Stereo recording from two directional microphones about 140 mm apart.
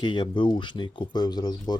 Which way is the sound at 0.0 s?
35° left (ahead or behind).